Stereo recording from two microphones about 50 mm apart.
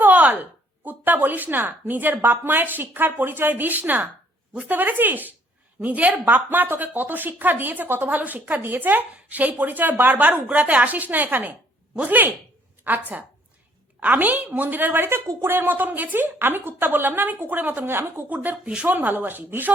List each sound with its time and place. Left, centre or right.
0.0 s a sound: right
0.9 s a woman's voice: right
8.2 s a woman's voice: right
18.9 s speech: right